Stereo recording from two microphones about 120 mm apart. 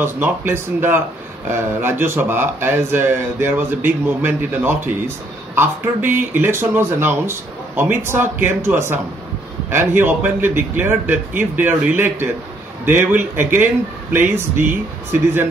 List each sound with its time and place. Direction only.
0.0 s speech: 20° right (ahead or behind)